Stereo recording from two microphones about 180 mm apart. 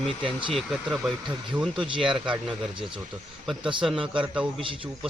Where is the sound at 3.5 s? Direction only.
Centre (ahead or behind).